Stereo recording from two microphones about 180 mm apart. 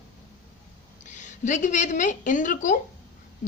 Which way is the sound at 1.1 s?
45° left (ahead or behind).